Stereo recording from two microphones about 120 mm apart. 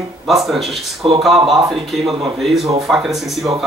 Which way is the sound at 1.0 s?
45° right (ahead or behind).